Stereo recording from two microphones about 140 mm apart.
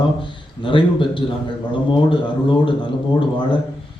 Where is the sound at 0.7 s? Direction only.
35° left (ahead or behind).